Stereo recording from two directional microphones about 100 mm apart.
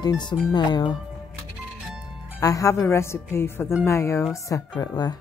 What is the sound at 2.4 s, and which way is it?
Speech, 35° left (ahead or behind).